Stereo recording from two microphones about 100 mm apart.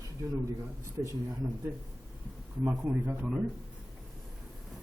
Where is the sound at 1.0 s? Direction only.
25° right (ahead or behind).